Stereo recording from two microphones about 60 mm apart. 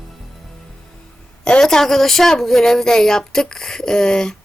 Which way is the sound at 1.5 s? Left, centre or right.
Centre.